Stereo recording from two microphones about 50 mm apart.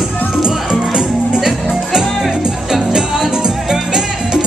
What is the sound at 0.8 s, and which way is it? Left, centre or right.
Music, centre.